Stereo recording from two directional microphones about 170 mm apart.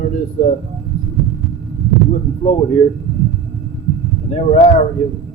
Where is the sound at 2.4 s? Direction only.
40° left (ahead or behind).